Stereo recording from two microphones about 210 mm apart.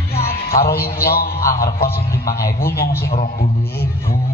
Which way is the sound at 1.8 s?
15° left (ahead or behind).